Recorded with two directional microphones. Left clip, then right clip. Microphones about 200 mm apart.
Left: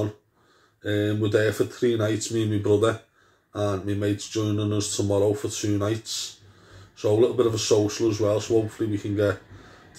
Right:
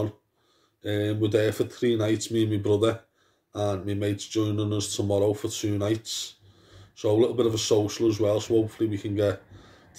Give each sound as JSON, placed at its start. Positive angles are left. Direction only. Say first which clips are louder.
{"t": 0.8, "sound": "speech", "louder": "left 2 dB", "side_deg": -25}
{"t": 7.0, "sound": "speech", "louder": "left 2 dB", "side_deg": -25}